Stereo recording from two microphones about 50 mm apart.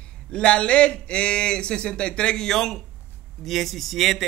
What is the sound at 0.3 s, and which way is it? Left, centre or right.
Speech, centre.